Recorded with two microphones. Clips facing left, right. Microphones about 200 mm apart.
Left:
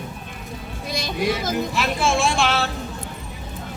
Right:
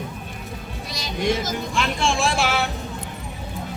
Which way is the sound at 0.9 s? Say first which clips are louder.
Even; 55° left (ahead or behind).